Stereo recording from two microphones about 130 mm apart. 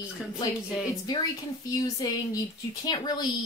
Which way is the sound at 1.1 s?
30° left (ahead or behind).